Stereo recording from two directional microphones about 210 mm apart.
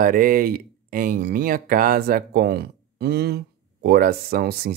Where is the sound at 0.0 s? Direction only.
40° right (ahead or behind).